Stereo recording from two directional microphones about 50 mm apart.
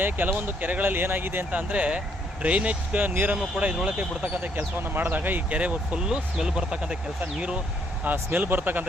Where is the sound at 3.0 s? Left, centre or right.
Right.